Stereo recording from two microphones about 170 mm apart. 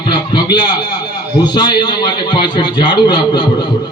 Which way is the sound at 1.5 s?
25° left (ahead or behind).